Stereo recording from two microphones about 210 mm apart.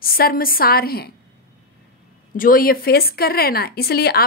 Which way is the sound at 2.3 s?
40° left (ahead or behind).